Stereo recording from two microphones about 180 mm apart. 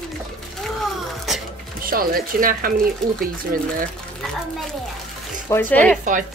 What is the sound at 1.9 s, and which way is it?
Speech, 55° right (ahead or behind).